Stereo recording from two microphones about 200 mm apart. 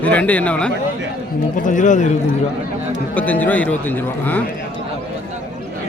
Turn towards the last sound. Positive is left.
turn(degrees=10)  # may be behind; listen again after turning